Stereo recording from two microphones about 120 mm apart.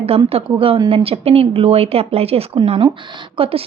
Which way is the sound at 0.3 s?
50° right (ahead or behind).